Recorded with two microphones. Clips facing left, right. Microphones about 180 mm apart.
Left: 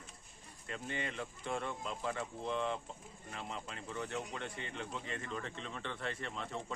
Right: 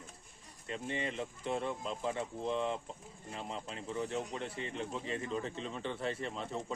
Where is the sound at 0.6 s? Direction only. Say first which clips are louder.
Right 3 dB; 30° right (ahead or behind).